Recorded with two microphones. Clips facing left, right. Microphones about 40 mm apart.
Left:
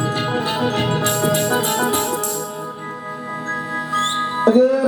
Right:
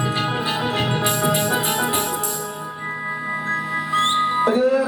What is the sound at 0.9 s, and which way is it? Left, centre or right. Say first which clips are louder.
Music: left 2 dB; centre.